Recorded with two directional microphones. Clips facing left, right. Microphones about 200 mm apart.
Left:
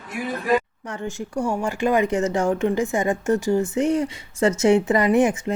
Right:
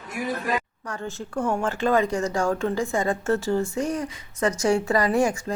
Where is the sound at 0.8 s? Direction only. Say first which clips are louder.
Left 3 dB; 20° left (ahead or behind).